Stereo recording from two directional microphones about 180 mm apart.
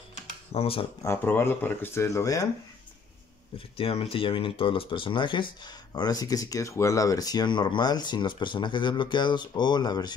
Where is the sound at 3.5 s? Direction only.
30° left (ahead or behind).